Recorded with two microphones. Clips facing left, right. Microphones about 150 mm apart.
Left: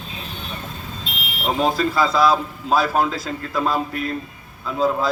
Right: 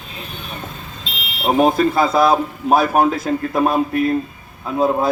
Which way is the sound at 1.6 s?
55° right (ahead or behind).